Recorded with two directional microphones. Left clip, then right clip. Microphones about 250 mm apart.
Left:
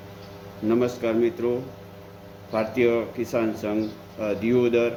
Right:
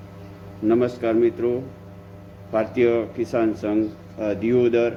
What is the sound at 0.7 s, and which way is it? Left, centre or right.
A man's voice, centre.